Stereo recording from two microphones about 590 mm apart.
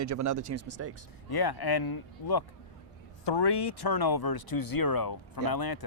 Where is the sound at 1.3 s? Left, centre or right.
Left.